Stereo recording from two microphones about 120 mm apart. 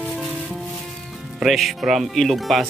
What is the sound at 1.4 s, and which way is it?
Speech, centre (ahead or behind).